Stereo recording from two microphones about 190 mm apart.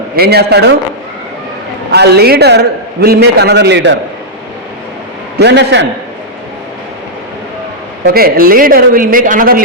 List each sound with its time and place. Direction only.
0.2 s a man's voice: 55° right (ahead or behind)
1.9 s a man's voice: 55° right (ahead or behind)
5.4 s a man's voice: 60° right (ahead or behind)
8.0 s a woman's voice: 50° right (ahead or behind)